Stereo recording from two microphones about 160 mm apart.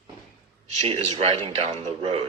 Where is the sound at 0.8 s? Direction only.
35° right (ahead or behind).